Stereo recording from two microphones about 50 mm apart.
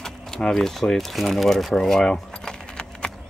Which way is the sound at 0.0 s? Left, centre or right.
Centre.